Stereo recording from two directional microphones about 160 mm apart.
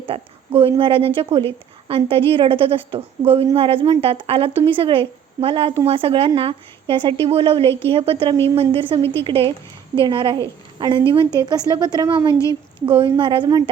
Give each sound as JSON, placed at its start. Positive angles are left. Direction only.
{"t": 0.1, "sound": "a woman's voice", "side_deg": -35}